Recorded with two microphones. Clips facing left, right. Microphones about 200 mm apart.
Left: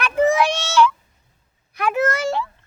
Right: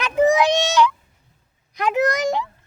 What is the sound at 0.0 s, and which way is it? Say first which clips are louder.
Child singing: right 1 dB; 15° right (ahead or behind).